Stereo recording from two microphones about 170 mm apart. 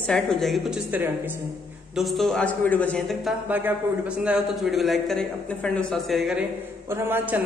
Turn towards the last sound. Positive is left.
turn(degrees=-10)  # may be behind; listen again after turning